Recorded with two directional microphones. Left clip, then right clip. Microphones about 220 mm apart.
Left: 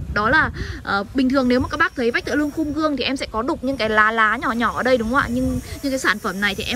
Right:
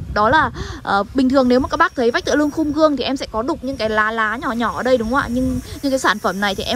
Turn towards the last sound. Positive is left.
turn(degrees=-20)  # may be behind; listen again after turning